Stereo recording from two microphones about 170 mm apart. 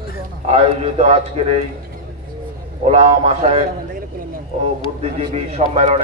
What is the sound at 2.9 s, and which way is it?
Speech, 35° right (ahead or behind).